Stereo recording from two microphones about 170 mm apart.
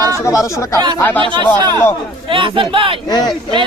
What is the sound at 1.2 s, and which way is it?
A man's voice, 30° right (ahead or behind).